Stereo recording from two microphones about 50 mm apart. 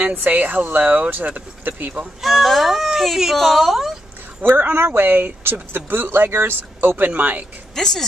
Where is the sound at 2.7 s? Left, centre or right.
Centre.